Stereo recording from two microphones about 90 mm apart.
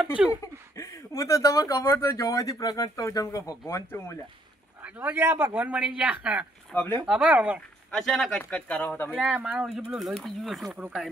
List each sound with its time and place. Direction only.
0.4 s speech: 35° left (ahead or behind)
4.8 s speech: 20° right (ahead or behind)
6.7 s speech: 20° left (ahead or behind)
7.1 s speech: 15° right (ahead or behind)
7.9 s speech: 5° left (ahead or behind); by 9.2 s 25° left (ahead or behind)
9.2 s speech: 5° right (ahead or behind)